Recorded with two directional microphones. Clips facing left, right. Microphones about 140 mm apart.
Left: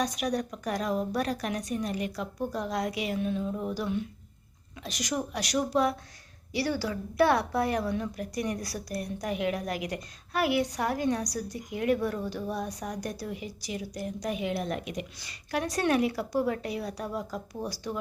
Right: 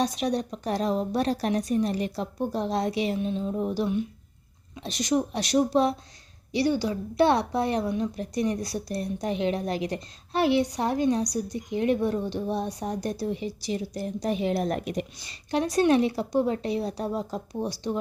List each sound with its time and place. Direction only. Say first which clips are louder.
0.0 s a woman's voice: right 3 dB; 25° right (ahead or behind)
15.2 s a woman's voice: right 4 dB; 25° right (ahead or behind)